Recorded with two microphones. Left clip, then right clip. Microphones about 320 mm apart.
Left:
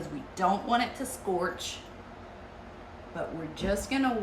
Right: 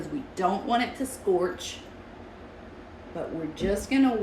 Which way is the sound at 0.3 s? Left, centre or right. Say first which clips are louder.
Right 1 dB; centre.